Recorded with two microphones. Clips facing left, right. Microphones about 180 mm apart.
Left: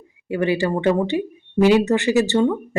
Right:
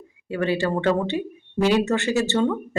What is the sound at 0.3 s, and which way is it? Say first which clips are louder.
Speech: left 3 dB; 15° left (ahead or behind).